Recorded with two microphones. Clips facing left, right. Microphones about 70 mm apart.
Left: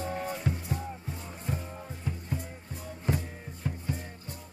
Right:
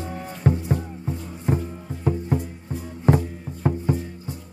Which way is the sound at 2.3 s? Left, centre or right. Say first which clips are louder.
Right 11 dB; right.